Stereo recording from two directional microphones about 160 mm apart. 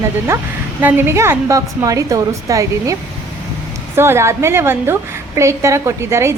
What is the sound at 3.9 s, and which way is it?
A woman's voice, 15° right (ahead or behind).